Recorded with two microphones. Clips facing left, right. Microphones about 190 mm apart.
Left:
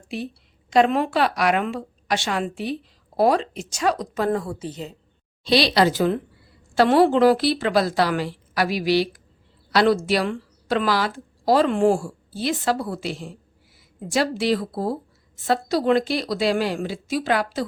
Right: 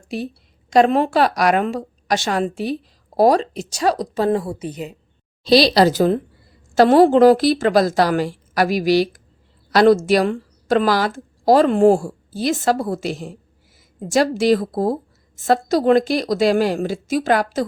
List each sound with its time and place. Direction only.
0.7 s a woman's voice: 40° right (ahead or behind); by 4.9 s 15° right (ahead or behind)
5.4 s a woman's voice: 35° right (ahead or behind)